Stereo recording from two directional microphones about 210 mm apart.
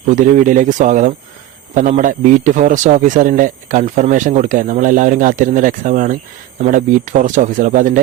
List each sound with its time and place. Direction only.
0.1 s speech: 35° right (ahead or behind)